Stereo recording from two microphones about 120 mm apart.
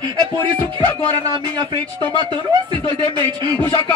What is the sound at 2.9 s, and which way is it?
Speech, 35° left (ahead or behind).